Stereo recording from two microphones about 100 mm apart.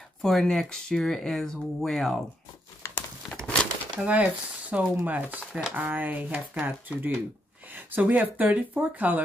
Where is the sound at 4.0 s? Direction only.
15° right (ahead or behind).